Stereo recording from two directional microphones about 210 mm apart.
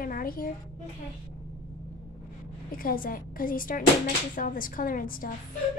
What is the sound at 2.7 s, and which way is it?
Speech, 45° left (ahead or behind).